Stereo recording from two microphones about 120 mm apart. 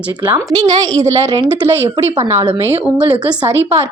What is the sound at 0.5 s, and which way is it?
A woman's voice, 35° right (ahead or behind).